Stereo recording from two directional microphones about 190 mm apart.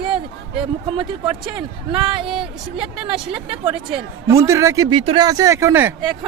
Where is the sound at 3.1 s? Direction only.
30° right (ahead or behind).